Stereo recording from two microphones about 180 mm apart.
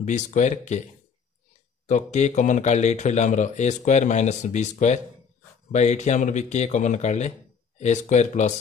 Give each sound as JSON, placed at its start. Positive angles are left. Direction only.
{"t": 0.0, "sound": "speech", "side_deg": 40}
{"t": 1.9, "sound": "speech", "side_deg": 40}